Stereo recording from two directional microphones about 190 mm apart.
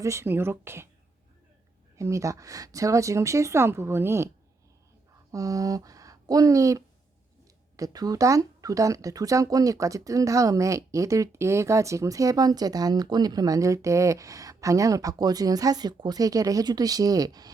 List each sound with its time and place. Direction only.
0.0 s speech: 15° right (ahead or behind)
2.0 s speech: 15° right (ahead or behind)
5.3 s speech: 20° right (ahead or behind)